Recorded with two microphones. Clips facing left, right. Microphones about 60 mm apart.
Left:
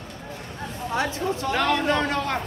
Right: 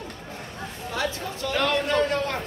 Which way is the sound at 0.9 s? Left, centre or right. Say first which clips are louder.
Left 4 dB; left.